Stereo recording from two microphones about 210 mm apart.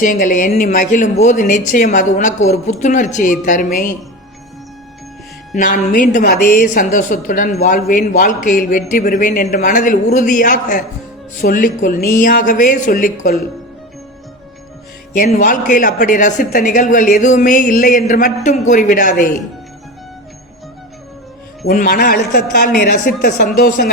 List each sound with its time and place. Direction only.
0.0 s speech: 40° left (ahead or behind)
5.5 s speech: 40° left (ahead or behind)
15.2 s speech: 40° left (ahead or behind)
21.7 s a man's voice: 45° left (ahead or behind)